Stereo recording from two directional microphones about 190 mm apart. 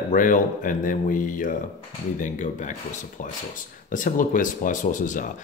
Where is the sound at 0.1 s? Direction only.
45° left (ahead or behind).